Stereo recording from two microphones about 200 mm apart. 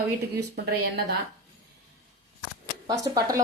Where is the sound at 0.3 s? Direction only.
55° right (ahead or behind).